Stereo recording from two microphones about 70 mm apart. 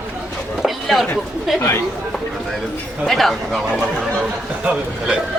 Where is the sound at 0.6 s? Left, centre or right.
Centre.